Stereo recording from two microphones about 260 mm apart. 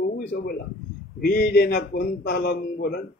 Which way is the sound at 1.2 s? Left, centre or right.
Left.